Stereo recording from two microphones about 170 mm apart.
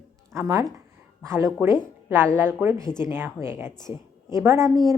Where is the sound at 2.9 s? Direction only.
25° left (ahead or behind).